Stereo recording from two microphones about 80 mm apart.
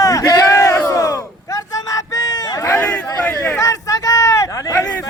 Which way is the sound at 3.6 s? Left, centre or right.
Left.